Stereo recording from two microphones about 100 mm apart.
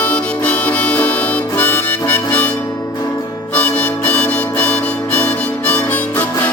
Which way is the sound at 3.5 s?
15° left (ahead or behind).